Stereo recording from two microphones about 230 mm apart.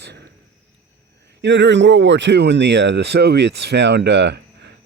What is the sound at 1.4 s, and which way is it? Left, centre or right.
A man's voice, right.